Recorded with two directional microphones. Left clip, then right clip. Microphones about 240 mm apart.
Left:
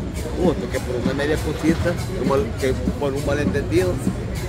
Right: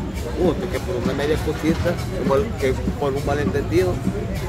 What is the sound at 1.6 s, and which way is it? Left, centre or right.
Speech, centre.